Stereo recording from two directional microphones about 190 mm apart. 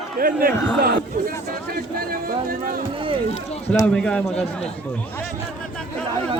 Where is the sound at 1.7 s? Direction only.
50° right (ahead or behind).